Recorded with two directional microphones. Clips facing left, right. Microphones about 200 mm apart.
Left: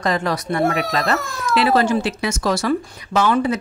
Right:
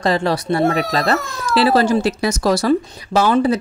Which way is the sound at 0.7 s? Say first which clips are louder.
Right 2 dB; centre (ahead or behind).